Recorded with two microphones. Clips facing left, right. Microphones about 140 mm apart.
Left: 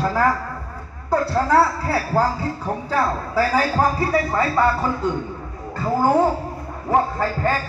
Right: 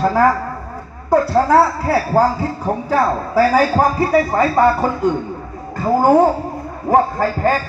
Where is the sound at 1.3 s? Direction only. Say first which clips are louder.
Right 2 dB; 25° right (ahead or behind).